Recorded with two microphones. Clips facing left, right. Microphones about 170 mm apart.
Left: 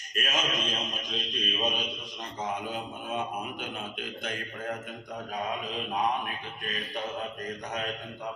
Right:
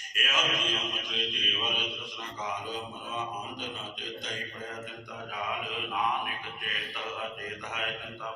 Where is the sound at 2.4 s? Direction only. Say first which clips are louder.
Left 3 dB; 55° left (ahead or behind).